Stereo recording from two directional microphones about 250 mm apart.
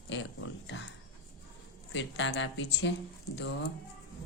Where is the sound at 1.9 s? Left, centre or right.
Left.